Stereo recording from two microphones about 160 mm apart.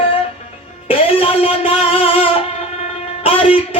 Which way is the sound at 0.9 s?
35° left (ahead or behind).